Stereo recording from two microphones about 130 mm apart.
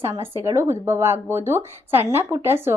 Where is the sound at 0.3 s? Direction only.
20° right (ahead or behind).